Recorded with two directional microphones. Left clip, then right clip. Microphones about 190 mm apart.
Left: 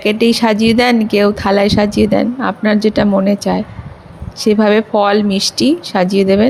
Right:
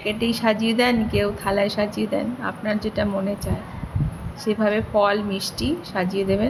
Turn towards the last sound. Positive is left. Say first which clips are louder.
# left 11 dB
turn(degrees=45)  # may be behind; listen again after turning